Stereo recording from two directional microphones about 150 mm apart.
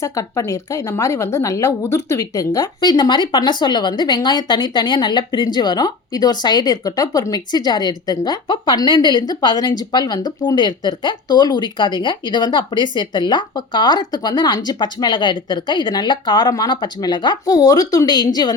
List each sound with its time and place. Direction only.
0.0 s speech: 20° left (ahead or behind)